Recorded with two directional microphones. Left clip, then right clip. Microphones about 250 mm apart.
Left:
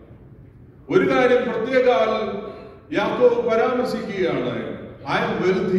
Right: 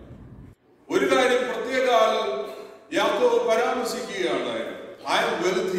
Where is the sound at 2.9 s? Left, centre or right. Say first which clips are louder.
Left 3 dB; centre.